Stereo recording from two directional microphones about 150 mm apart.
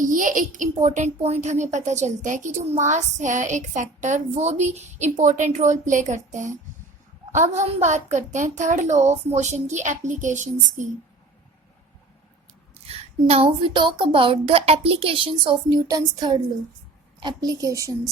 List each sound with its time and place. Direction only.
0.0 s speech: 60° right (ahead or behind)
7.3 s speech: 55° right (ahead or behind)
12.7 s a woman's voice: 40° right (ahead or behind); by 18.1 s 20° right (ahead or behind)